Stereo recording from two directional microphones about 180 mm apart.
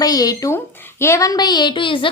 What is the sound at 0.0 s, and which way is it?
A woman's voice, 20° left (ahead or behind).